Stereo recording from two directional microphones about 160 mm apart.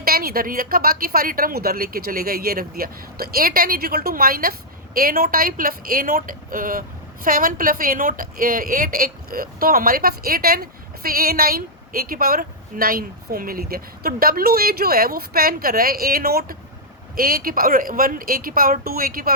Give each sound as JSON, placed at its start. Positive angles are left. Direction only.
{"t": 0.0, "sound": "a woman's voice", "side_deg": -70}